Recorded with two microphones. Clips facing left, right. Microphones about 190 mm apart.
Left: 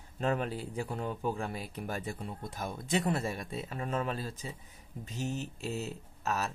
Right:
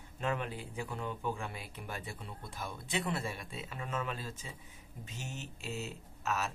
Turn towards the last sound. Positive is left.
turn(degrees=35)  # may be behind; listen again after turning